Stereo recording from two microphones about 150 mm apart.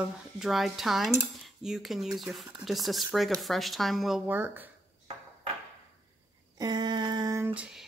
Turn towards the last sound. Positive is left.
turn(degrees=-5)  # may be behind; listen again after turning